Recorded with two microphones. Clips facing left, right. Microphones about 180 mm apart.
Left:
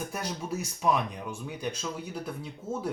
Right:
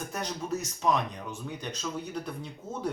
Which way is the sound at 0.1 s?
10° left (ahead or behind).